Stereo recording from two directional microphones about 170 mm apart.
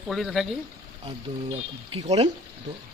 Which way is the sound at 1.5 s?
40° right (ahead or behind).